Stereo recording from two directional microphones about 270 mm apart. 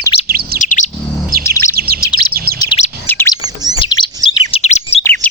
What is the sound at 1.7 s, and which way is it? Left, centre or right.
Chirp, right.